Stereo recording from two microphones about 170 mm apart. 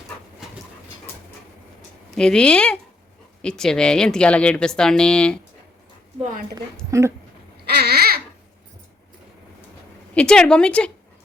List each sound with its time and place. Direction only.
0.4 s dog: 5° right (ahead or behind)
2.0 s speech: 5° left (ahead or behind)
6.9 s speech: 20° right (ahead or behind)
7.5 s baby cry: 70° right (ahead or behind)
10.2 s speech: 5° left (ahead or behind)